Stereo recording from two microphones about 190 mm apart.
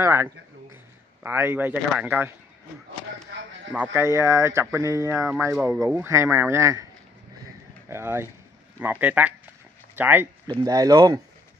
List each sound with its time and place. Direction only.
0.0 s speech: 15° right (ahead or behind)
3.7 s speech: 10° right (ahead or behind)
7.9 s speech: 10° right (ahead or behind)
10.4 s speech: 20° right (ahead or behind)